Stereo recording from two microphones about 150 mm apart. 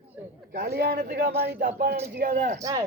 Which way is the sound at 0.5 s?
90° right.